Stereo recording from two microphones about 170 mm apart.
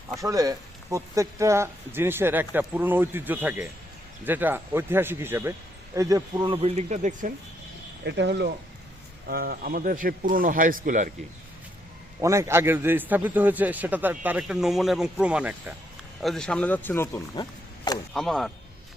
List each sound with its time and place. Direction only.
0.2 s speech: 20° right (ahead or behind); by 7.3 s 50° right (ahead or behind)
8.0 s speech: 85° right
9.2 s a man's voice: 60° right (ahead or behind)
12.2 s speech: 15° right (ahead or behind); by 17.4 s 15° left (ahead or behind)
18.1 s speech: centre (ahead or behind)